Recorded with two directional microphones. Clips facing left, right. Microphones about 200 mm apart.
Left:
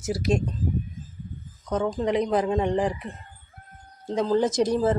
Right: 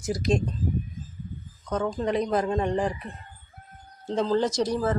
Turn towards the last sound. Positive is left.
turn(degrees=20)  # may be behind; listen again after turning